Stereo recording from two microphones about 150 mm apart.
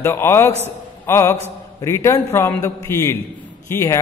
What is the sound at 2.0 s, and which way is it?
Speech, 20° left (ahead or behind).